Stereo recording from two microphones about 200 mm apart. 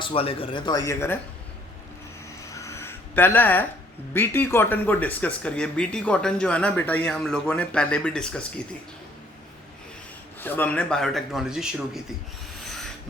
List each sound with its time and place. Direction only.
0.0 s speech: 30° left (ahead or behind); by 1.2 s 10° left (ahead or behind)
2.6 s a sound: 15° left (ahead or behind)
4.1 s speech: 10° left (ahead or behind)
10.4 s speech: 10° left (ahead or behind)
12.6 s rub: centre (ahead or behind)